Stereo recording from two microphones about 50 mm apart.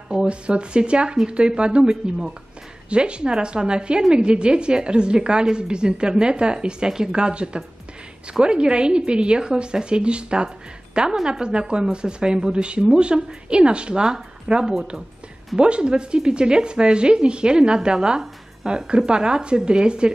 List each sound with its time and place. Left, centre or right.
0.1 s a woman's voice: centre